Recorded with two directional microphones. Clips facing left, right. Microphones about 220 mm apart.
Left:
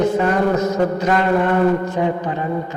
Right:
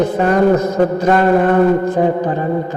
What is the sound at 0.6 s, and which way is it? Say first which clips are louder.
Mantra: right 3 dB; 55° right (ahead or behind).